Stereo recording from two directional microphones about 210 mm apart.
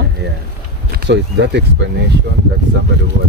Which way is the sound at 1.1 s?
55° right (ahead or behind).